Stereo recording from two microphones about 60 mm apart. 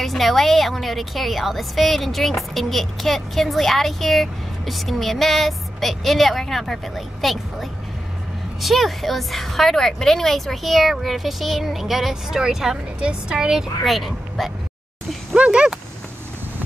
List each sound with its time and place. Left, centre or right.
0.0 s a woman's voice: centre
15.3 s speech: centre